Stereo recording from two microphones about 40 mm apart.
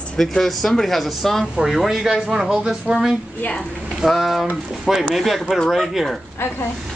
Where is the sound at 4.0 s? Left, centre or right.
Centre.